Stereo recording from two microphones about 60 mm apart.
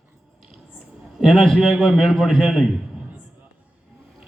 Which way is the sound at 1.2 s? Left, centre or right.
Centre.